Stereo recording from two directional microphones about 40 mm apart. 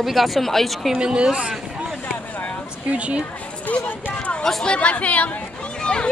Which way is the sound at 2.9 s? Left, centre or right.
Right.